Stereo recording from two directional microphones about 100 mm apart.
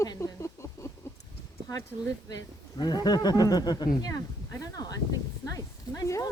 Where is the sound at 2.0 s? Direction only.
45° left (ahead or behind).